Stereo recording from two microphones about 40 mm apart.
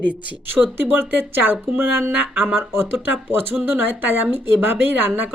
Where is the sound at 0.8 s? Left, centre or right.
Right.